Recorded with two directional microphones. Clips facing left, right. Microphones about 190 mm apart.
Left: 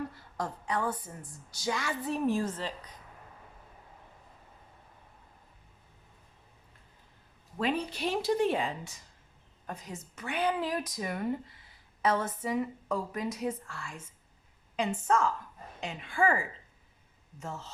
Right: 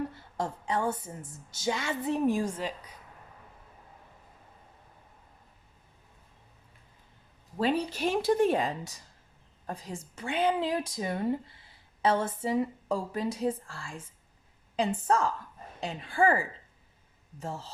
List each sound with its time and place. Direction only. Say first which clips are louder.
0.3 s a woman's voice: right 2 dB; 25° right (ahead or behind); by 2.9 s 10° right (ahead or behind)
7.6 s a woman's voice: right 3 dB; 35° right (ahead or behind)
17.4 s a woman's voice: right 3 dB; 30° right (ahead or behind)